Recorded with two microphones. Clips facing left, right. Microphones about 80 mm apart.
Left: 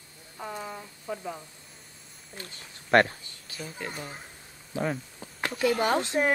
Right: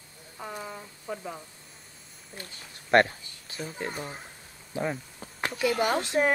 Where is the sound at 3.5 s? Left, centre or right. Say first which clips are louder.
Right 3 dB; right.